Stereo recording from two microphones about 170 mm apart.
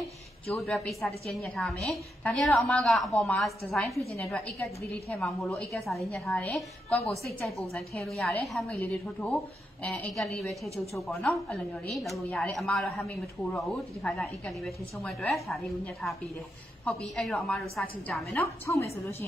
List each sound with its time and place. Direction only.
0.5 s a woman's voice: centre (ahead or behind)
18.4 s a woman's voice: 15° left (ahead or behind)